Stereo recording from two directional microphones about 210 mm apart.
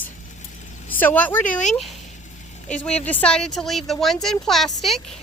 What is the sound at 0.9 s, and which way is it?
A woman's voice, 10° left (ahead or behind).